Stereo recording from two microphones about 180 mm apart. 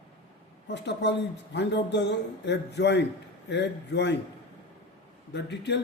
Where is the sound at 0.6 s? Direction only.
75° left (ahead or behind).